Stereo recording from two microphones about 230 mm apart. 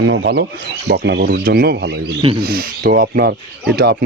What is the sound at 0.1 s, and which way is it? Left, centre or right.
Speech, right.